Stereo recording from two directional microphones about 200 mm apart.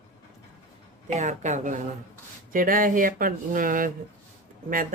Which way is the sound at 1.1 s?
40° right (ahead or behind).